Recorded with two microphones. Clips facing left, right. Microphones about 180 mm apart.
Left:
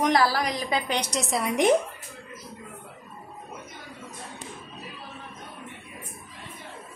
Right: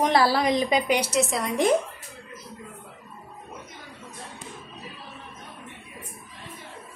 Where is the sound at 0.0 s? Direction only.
30° right (ahead or behind); by 1.4 s centre (ahead or behind).